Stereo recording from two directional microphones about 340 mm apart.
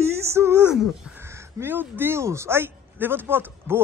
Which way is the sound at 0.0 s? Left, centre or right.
Centre.